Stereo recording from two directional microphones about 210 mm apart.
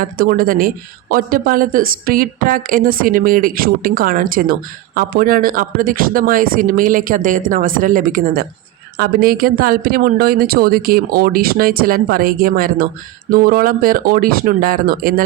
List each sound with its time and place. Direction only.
0.0 s a woman's voice: 45° right (ahead or behind)